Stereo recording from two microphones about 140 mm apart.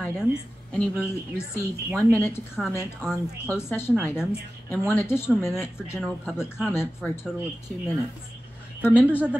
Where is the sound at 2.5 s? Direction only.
Centre (ahead or behind).